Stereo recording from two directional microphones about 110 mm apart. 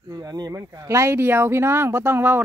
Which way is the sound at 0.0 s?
35° right (ahead or behind).